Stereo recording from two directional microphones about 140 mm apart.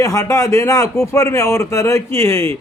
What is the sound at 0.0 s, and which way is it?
A man's voice, 20° left (ahead or behind).